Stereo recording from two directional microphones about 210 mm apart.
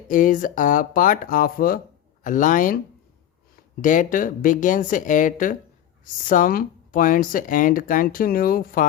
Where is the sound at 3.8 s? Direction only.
40° left (ahead or behind).